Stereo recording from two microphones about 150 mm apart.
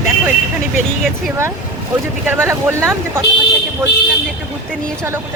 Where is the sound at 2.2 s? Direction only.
15° right (ahead or behind).